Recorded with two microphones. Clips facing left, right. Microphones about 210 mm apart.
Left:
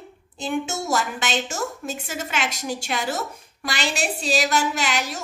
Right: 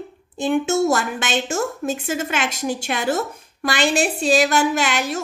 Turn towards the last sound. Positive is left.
turn(degrees=-55)  # may be behind; listen again after turning